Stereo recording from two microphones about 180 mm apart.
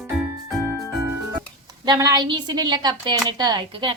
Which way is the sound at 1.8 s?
20° right (ahead or behind).